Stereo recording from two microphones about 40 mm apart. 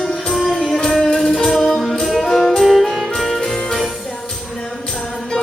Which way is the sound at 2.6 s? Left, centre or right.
Centre.